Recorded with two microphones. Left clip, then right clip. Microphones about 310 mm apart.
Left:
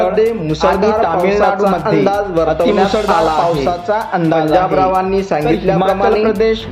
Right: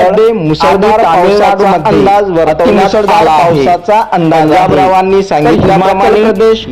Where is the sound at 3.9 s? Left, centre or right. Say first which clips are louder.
Right 7 dB; centre.